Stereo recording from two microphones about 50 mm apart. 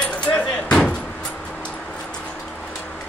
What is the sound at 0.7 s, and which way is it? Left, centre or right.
Slam, centre.